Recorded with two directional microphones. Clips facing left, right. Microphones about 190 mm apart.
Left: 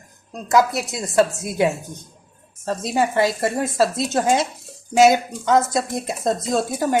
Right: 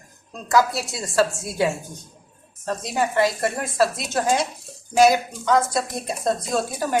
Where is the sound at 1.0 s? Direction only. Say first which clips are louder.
Left 3 dB; 20° left (ahead or behind).